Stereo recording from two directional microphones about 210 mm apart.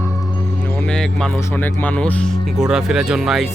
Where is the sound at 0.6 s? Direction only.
5° left (ahead or behind).